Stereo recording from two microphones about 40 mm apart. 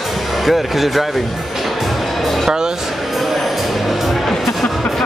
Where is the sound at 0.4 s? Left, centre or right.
Centre.